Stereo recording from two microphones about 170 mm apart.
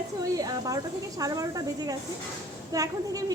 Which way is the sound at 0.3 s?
20° right (ahead or behind).